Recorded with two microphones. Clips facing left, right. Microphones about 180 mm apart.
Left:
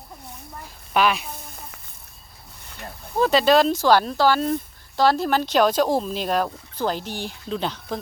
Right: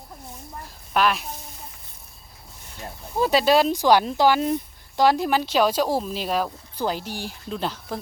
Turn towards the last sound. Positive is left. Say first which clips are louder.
# left 2 dB
turn(degrees=-5)  # may be behind; listen again after turning